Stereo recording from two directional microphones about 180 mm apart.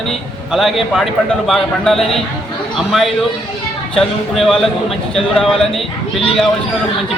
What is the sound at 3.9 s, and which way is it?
Speech, centre (ahead or behind).